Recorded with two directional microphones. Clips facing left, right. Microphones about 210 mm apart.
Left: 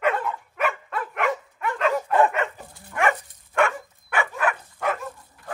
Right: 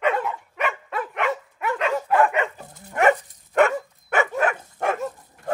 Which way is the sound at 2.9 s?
45° right (ahead or behind).